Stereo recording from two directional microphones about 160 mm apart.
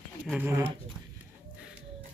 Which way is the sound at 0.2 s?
10° right (ahead or behind).